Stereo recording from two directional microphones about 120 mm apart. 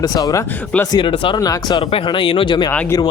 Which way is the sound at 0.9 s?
45° left (ahead or behind).